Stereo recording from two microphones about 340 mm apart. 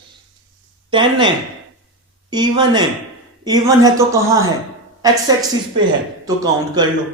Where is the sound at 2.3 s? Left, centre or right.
Centre.